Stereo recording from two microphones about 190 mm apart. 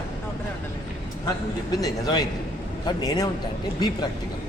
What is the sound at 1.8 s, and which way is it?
A man's voice, 20° left (ahead or behind).